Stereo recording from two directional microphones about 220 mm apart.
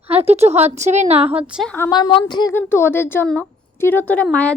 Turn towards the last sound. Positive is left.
turn(degrees=5)  # may be behind; listen again after turning